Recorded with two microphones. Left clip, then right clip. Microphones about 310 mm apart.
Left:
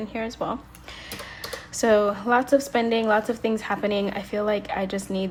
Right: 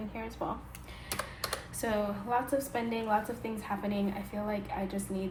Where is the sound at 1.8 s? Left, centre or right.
Centre.